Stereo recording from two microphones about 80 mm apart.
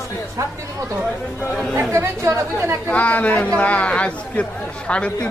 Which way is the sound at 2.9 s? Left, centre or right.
Centre.